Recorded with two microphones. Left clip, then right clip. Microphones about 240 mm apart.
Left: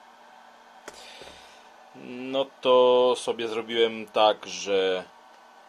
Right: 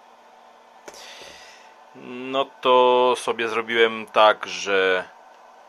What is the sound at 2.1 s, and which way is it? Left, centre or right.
A man's voice, centre.